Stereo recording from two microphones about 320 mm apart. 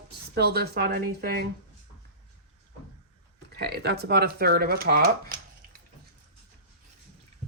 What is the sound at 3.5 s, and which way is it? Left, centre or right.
Speech, right.